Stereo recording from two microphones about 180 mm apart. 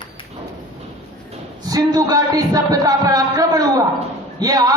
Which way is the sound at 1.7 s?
20° right (ahead or behind).